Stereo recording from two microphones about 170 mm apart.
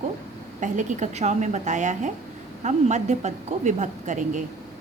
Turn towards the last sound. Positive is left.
turn(degrees=-45)  # may be behind; listen again after turning